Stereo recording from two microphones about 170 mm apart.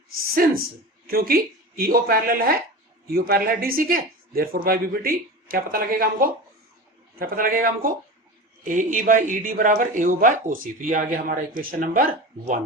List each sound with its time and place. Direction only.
0.3 s speech: 60° right (ahead or behind)